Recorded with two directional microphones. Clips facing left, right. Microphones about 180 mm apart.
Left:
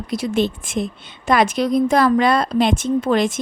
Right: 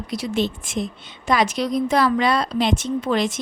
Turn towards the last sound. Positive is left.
turn(degrees=50)  # may be behind; listen again after turning